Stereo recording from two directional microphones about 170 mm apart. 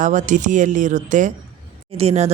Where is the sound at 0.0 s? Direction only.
45° right (ahead or behind).